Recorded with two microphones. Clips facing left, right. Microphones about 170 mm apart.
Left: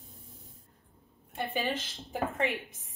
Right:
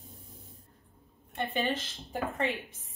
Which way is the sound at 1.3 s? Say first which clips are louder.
Right 1 dB; 10° left (ahead or behind).